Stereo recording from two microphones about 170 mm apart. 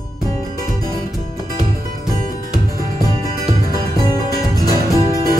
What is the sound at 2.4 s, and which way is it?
Music, 55° right (ahead or behind).